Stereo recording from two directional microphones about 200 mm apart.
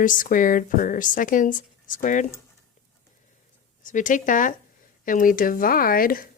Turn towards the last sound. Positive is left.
turn(degrees=45)  # may be behind; listen again after turning